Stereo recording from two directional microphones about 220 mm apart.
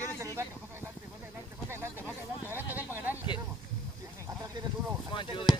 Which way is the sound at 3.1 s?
20° left (ahead or behind).